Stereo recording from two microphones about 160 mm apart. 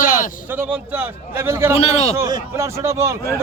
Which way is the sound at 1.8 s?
40° left (ahead or behind).